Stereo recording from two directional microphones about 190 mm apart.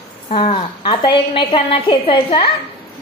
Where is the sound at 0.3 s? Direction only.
30° left (ahead or behind).